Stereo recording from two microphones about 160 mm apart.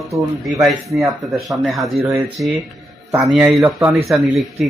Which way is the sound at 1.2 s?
Centre (ahead or behind).